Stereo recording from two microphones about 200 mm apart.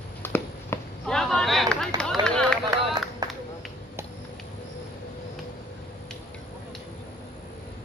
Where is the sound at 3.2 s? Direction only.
20° right (ahead or behind).